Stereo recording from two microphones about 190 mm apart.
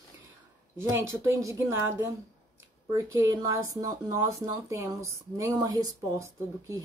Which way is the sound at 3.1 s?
20° right (ahead or behind).